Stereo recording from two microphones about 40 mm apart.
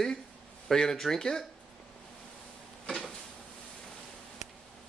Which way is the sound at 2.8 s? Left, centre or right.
Left.